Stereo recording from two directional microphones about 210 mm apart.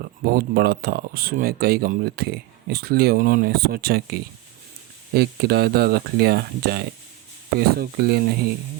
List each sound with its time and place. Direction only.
0.3 s speech: 45° right (ahead or behind)
5.1 s speech: 50° right (ahead or behind)